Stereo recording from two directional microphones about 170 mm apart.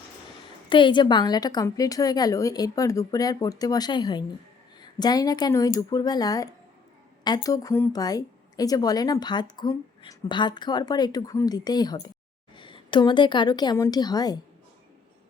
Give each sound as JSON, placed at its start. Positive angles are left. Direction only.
{"t": 0.7, "sound": "a woman's voice", "side_deg": 30}